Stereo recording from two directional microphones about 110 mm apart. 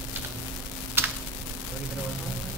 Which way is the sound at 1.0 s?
20° right (ahead or behind).